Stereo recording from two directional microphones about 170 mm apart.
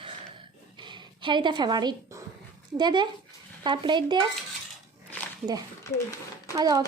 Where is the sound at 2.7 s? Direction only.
25° right (ahead or behind).